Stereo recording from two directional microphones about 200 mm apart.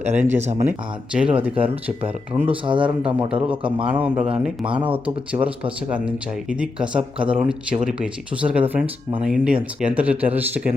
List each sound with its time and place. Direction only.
0.2 s speech: 10° right (ahead or behind)
2.5 s speech: 25° right (ahead or behind)
3.2 s speech: 5° right (ahead or behind)